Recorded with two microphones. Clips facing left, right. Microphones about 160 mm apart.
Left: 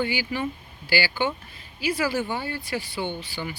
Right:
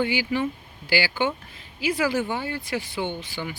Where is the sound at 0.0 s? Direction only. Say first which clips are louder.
Right 3 dB; 20° right (ahead or behind).